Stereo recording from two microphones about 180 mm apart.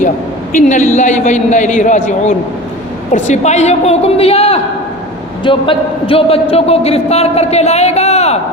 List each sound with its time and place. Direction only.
0.5 s a man's voice: 45° left (ahead or behind)